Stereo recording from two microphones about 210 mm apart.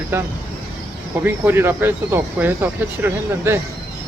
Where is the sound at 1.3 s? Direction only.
10° right (ahead or behind).